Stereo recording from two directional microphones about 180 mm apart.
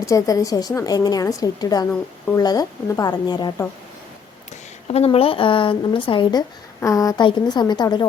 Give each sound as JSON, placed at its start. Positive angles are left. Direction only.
{"t": 0.0, "sound": "a woman's voice", "side_deg": 20}
{"t": 4.9, "sound": "a woman's voice", "side_deg": 35}